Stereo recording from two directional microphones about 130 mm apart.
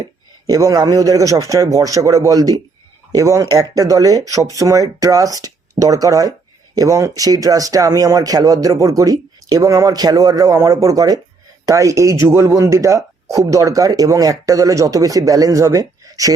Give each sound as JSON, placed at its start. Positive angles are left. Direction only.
{"t": 0.4, "sound": "speech", "side_deg": -25}